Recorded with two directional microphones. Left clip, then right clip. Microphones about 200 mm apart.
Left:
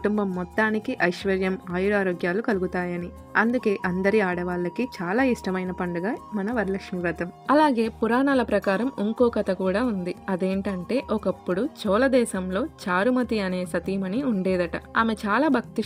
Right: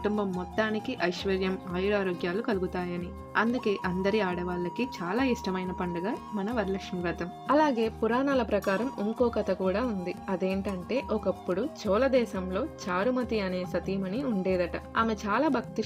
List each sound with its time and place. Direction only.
0.3 s speech: 30° left (ahead or behind)
7.4 s speech: 40° left (ahead or behind)